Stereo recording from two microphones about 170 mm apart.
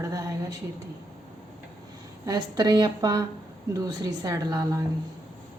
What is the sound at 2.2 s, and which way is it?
A woman's voice, 20° right (ahead or behind).